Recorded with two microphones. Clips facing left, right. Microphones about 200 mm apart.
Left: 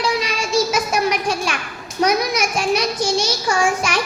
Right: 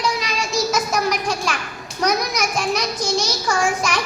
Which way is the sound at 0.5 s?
10° left (ahead or behind).